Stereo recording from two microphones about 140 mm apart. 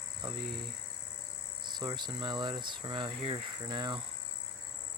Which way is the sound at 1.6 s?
30° right (ahead or behind).